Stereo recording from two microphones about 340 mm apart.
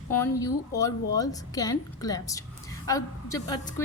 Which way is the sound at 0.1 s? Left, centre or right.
Centre.